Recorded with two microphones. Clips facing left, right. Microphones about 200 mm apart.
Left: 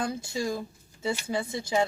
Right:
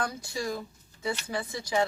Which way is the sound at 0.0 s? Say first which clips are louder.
Left 2 dB; 25° left (ahead or behind).